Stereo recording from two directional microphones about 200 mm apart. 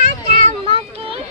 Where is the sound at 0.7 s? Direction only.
30° right (ahead or behind).